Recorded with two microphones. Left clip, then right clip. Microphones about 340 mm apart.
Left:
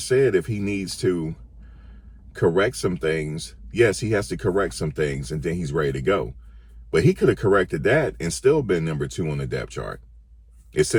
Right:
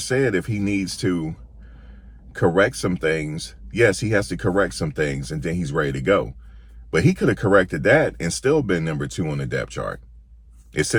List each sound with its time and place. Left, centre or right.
0.2 s speech: centre
2.3 s a man's voice: centre